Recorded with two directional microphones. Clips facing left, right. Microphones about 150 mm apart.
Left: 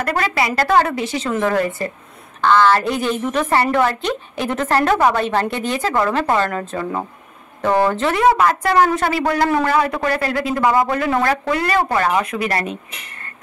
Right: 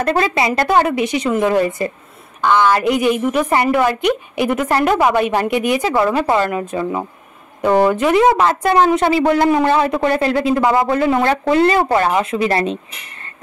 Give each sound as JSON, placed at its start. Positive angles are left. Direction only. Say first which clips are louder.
{"t": 0.0, "sound": "a woman's voice", "louder": "right 3 dB", "side_deg": -25}
{"t": 8.2, "sound": "speech", "louder": "left 2 dB", "side_deg": -25}